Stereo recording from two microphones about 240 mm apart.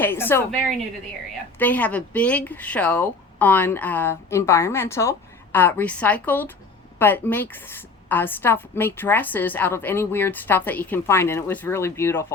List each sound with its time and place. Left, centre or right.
0.0 s a woman's voice: centre
1.5 s a woman's voice: centre